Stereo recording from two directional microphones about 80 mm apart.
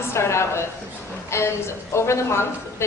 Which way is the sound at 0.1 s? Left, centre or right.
Left.